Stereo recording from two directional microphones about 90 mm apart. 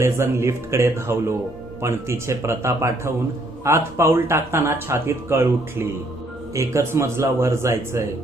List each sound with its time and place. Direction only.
0.0 s speech: 30° right (ahead or behind)